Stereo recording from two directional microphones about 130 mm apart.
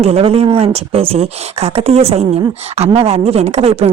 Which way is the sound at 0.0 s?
50° right (ahead or behind).